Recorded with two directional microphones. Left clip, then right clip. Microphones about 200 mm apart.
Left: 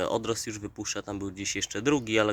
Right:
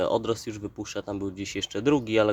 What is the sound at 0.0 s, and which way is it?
Speech, 5° right (ahead or behind).